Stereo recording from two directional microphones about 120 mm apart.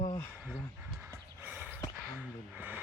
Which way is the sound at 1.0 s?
20° right (ahead or behind).